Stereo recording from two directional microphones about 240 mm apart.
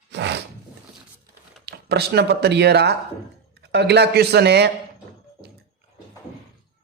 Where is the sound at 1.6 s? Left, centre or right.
Right.